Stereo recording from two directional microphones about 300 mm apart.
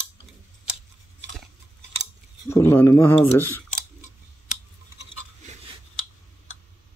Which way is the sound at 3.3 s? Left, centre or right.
Centre.